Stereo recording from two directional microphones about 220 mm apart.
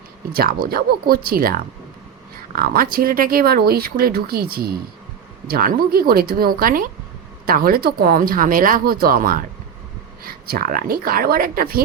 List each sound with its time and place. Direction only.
0.3 s speech: 40° right (ahead or behind)